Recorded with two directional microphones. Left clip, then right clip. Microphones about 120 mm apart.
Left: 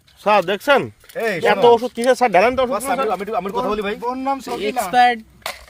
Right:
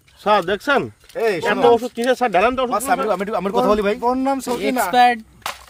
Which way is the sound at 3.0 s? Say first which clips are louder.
Right 1 dB; 70° right (ahead or behind).